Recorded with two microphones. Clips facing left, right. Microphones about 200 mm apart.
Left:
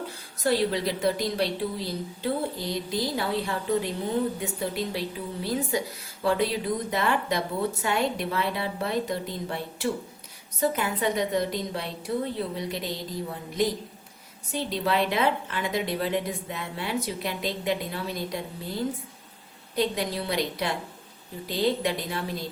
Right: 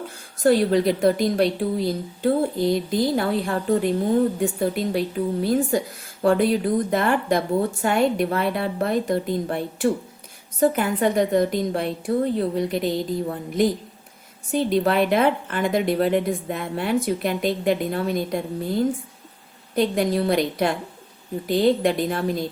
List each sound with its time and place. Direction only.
0.4 s a woman's voice: 50° right (ahead or behind)
14.5 s a woman's voice: 50° right (ahead or behind)